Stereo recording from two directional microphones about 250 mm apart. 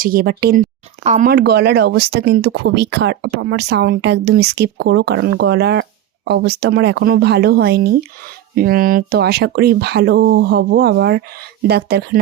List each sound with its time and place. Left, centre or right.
0.0 s speech: right